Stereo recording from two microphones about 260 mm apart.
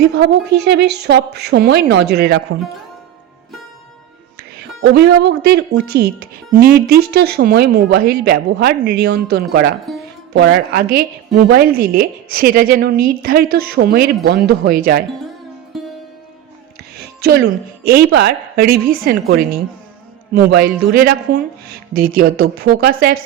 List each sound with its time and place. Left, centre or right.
0.0 s a woman's voice: right
4.8 s a woman's voice: right
6.5 s a woman's voice: right
17.2 s a woman's voice: right